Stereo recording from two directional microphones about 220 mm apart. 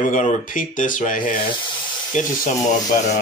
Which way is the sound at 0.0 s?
35° left (ahead or behind).